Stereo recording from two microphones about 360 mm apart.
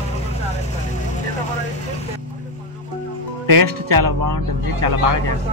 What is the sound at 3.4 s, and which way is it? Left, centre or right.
Speech, right.